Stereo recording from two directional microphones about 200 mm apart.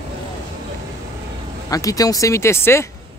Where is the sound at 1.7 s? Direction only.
15° left (ahead or behind).